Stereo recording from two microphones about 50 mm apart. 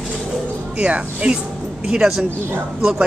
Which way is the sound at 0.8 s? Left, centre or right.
Right.